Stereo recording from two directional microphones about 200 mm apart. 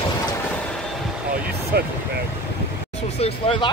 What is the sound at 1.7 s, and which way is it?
Vehicle, 55° right (ahead or behind).